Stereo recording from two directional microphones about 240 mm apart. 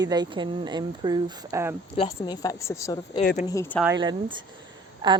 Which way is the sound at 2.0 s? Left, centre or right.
Left.